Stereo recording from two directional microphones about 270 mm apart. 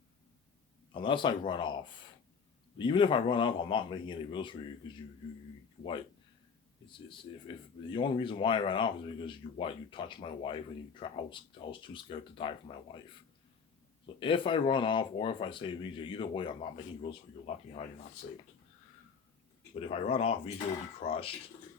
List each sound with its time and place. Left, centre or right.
0.9 s speech: centre
7.1 s speech: centre
14.2 s speech: centre
19.8 s speech: left